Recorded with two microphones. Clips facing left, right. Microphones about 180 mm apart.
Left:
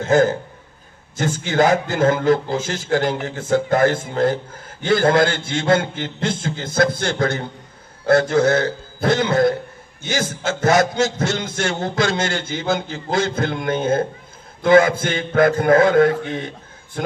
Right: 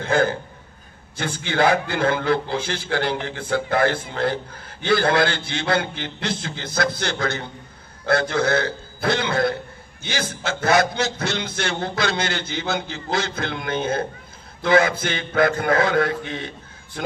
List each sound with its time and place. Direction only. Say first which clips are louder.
0.0 s a man's voice: left 5 dB; 40° left (ahead or behind)